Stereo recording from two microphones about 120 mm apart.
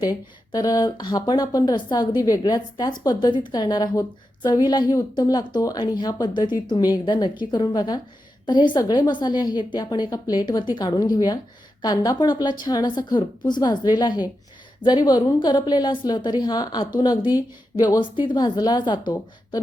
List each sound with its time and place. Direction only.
0.0 s a woman's voice: 30° left (ahead or behind)
18.2 s a woman's voice: 40° left (ahead or behind)